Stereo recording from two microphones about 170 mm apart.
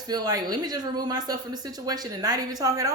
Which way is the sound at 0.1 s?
20° right (ahead or behind).